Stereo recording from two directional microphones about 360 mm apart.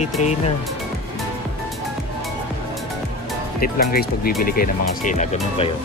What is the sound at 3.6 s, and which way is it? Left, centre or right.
Speech, left.